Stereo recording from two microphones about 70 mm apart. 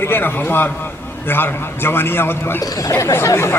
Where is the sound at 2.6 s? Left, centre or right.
Left.